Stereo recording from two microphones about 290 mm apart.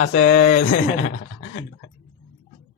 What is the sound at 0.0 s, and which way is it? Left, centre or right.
Speech, left.